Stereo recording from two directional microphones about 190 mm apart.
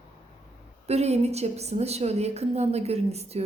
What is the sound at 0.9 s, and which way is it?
A woman's voice, 35° right (ahead or behind).